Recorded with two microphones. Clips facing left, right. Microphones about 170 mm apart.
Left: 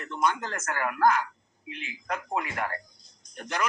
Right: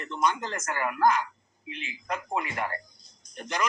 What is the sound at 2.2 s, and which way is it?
Speech, centre (ahead or behind).